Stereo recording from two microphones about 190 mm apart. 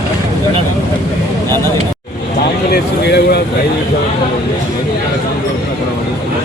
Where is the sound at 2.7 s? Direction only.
60° left (ahead or behind).